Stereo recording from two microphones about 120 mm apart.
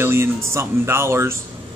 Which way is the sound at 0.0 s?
20° right (ahead or behind).